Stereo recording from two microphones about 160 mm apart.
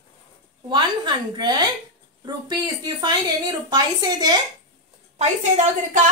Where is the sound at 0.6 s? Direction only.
30° right (ahead or behind).